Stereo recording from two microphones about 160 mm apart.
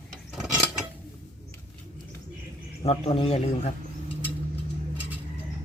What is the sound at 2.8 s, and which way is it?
Speech, 40° left (ahead or behind).